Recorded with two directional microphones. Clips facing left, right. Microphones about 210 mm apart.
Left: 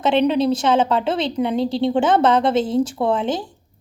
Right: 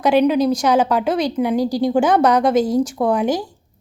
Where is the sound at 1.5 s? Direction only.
25° left (ahead or behind).